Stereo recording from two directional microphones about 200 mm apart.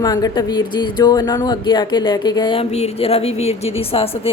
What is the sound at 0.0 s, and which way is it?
Speech, 20° left (ahead or behind).